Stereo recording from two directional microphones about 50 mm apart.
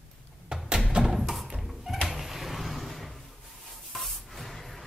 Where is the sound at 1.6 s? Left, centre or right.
Centre.